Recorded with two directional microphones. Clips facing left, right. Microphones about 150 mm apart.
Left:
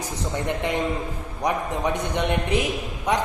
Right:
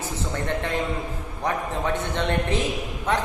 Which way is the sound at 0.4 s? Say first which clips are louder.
Left 2 dB; 15° left (ahead or behind).